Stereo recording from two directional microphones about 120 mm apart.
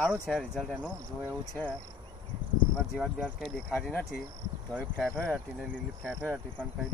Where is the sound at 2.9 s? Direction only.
5° left (ahead or behind).